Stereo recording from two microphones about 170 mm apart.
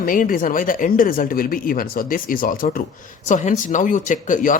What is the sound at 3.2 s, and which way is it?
Speech, 45° left (ahead or behind).